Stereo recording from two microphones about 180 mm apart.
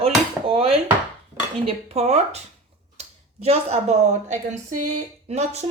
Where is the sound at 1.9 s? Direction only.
35° right (ahead or behind).